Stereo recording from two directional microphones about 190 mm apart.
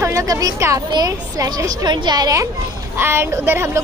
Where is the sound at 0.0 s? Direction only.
15° right (ahead or behind).